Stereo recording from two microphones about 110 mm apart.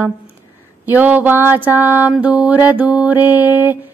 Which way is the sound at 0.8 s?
15° right (ahead or behind).